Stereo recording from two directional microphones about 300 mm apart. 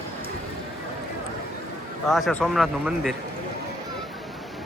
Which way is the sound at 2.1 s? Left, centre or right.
Centre.